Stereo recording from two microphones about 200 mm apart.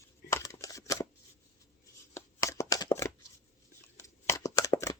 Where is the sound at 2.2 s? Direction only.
15° left (ahead or behind).